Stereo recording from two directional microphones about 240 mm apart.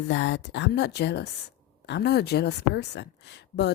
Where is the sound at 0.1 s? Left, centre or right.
Left.